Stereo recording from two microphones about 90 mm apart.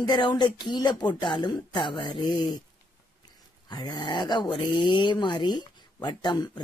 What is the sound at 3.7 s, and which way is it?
Speech, 55° left (ahead or behind).